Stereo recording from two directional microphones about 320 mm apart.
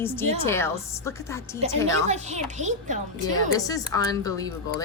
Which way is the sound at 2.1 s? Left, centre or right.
Right.